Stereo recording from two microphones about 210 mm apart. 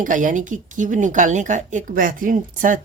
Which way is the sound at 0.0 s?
40° right (ahead or behind).